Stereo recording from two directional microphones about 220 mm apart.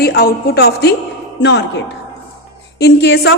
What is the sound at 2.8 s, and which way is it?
Speech, 50° left (ahead or behind).